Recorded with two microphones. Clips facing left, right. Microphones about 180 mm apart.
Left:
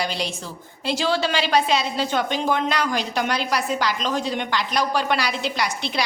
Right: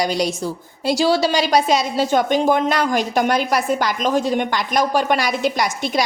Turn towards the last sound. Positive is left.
turn(degrees=-45)  # may be behind; listen again after turning